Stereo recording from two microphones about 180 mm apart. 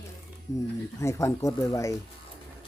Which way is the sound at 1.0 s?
15° left (ahead or behind).